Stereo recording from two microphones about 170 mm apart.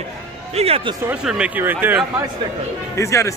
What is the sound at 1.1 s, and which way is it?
Speech, 5° right (ahead or behind).